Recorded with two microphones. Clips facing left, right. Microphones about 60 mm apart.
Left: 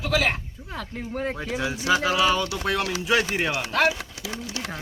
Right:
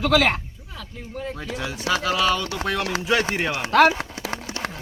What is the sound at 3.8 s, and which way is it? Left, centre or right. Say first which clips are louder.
Speech: right 5 dB; right.